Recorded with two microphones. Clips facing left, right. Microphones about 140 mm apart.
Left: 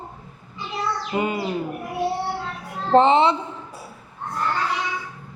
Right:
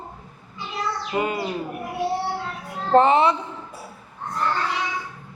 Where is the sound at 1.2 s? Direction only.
20° left (ahead or behind).